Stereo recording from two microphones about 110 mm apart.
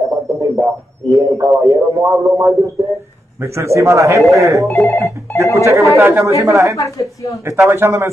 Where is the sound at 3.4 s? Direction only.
25° right (ahead or behind).